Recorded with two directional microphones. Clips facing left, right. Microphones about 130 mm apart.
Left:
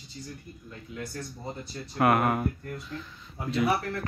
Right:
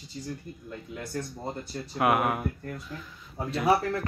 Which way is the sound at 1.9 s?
5° right (ahead or behind).